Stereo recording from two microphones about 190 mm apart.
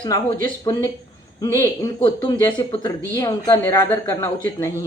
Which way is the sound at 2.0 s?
25° left (ahead or behind).